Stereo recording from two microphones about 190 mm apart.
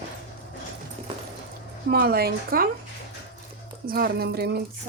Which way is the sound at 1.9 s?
50° right (ahead or behind).